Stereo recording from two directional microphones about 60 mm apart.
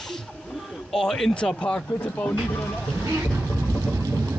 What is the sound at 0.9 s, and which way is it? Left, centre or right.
Speech, centre.